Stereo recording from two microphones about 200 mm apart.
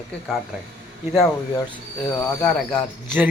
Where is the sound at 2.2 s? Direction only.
5° left (ahead or behind).